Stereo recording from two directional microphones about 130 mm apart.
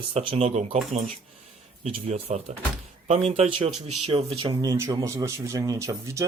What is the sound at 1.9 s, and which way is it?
Speech, 60° right (ahead or behind).